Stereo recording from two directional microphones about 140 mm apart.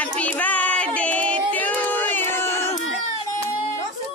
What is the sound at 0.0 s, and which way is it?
Music, 10° left (ahead or behind).